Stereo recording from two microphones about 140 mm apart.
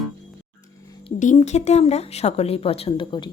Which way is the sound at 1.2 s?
60° left (ahead or behind).